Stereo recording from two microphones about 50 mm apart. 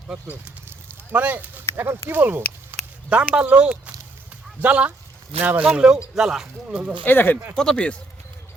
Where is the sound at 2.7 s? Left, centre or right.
Right.